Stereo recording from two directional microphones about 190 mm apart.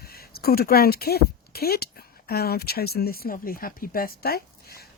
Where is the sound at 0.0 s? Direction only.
55° left (ahead or behind).